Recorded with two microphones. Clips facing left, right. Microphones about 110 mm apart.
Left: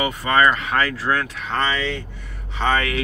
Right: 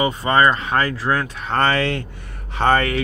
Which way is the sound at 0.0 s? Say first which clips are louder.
Right 2 dB; 25° right (ahead or behind).